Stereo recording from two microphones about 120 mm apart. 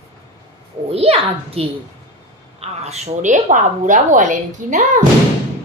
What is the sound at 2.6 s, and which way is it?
Speech, 65° right (ahead or behind).